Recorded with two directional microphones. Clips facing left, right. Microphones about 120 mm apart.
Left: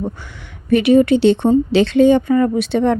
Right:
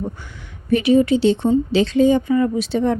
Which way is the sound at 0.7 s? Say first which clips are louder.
Left 3 dB; 65° left (ahead or behind).